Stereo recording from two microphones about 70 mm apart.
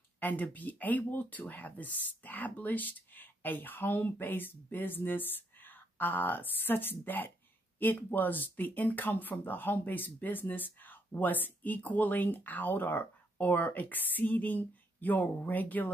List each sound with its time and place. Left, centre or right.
0.2 s speech: left